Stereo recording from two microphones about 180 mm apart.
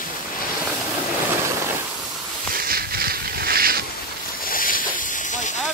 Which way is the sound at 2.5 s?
55° right (ahead or behind).